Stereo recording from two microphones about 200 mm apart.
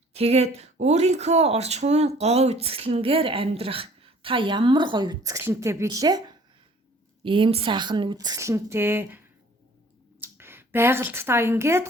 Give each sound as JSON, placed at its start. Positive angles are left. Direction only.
{"t": 0.1, "sound": "speech", "side_deg": -30}